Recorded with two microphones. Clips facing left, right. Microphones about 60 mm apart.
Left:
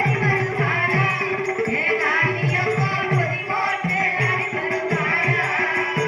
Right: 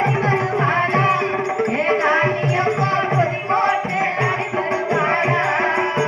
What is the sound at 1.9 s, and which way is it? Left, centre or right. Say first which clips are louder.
Music: right 4 dB; centre.